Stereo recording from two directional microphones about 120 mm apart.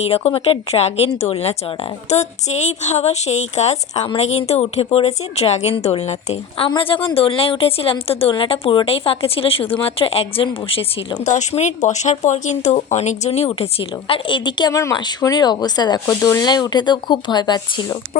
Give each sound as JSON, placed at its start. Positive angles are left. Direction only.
{"t": 0.0, "sound": "speech", "side_deg": 60}
{"t": 6.7, "sound": "a woman's voice", "side_deg": 45}
{"t": 11.2, "sound": "speech", "side_deg": 75}
{"t": 14.7, "sound": "speech", "side_deg": 25}
{"t": 14.9, "sound": "speech", "side_deg": 35}